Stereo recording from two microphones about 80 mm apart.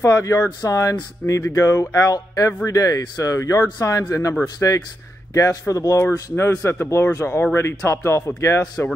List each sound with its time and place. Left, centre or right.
0.0 s speech: left